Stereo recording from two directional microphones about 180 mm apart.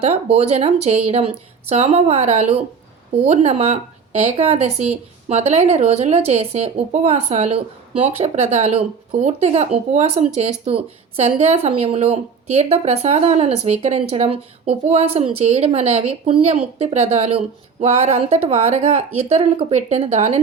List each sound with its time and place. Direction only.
0.0 s speech: 35° right (ahead or behind)